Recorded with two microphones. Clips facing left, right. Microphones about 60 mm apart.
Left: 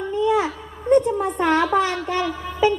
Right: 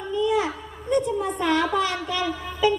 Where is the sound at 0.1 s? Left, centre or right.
Left.